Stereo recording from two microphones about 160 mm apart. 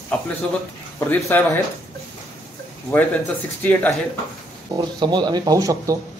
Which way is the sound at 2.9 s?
10° left (ahead or behind).